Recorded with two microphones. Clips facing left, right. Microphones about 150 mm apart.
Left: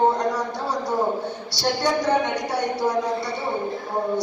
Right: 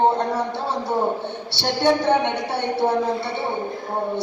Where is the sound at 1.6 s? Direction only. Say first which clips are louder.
Right 3 dB; 25° right (ahead or behind).